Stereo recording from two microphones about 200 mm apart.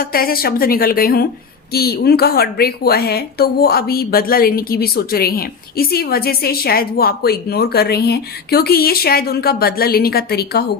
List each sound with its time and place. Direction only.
0.0 s speech: 45° left (ahead or behind)